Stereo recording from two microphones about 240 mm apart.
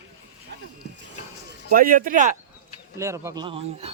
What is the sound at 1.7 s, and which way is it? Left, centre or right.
Speech, right.